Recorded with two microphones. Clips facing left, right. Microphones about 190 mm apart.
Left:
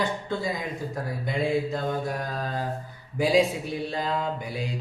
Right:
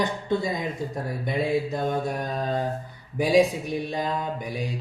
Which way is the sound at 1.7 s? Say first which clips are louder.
Right 2 dB; 20° right (ahead or behind).